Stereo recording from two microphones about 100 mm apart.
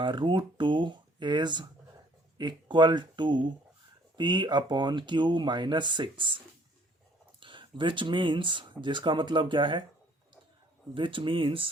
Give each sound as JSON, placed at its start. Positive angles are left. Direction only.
{"t": 0.0, "sound": "speech", "side_deg": -55}
{"t": 10.9, "sound": "speech", "side_deg": -60}